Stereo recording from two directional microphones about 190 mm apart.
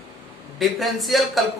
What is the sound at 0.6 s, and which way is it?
Speech, centre (ahead or behind).